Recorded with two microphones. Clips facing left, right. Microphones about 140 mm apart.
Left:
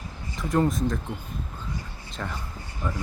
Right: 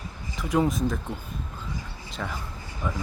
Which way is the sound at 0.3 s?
Centre (ahead or behind).